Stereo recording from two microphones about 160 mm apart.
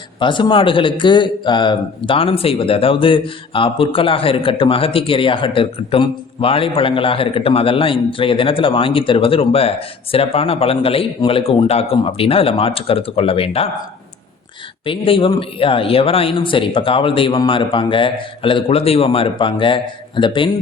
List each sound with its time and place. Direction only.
0.2 s a man's voice: 30° left (ahead or behind)
14.8 s a man's voice: 35° left (ahead or behind)